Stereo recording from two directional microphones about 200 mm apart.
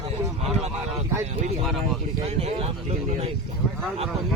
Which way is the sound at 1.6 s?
Centre (ahead or behind).